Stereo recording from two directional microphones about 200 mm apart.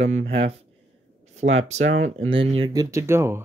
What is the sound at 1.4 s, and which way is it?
Speech, 75° right (ahead or behind).